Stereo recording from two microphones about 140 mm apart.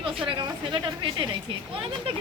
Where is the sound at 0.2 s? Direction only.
35° right (ahead or behind).